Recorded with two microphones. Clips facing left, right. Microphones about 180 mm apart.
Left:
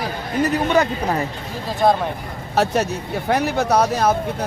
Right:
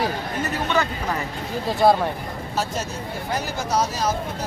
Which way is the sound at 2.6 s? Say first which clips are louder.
Left 9 dB; 65° left (ahead or behind).